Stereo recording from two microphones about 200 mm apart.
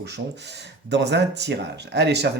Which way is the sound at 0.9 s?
60° right (ahead or behind).